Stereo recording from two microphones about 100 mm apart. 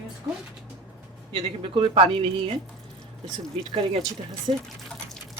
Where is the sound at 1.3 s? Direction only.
60° right (ahead or behind).